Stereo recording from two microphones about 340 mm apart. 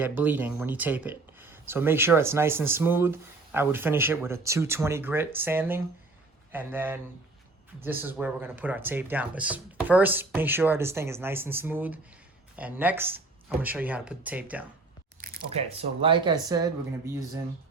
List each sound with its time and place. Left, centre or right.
0.0 s speech: centre
15.2 s speech: right